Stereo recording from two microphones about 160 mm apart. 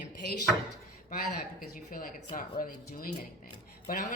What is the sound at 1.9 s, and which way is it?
A woman's voice, 60° left (ahead or behind).